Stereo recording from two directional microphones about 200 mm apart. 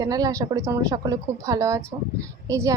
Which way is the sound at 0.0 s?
20° right (ahead or behind).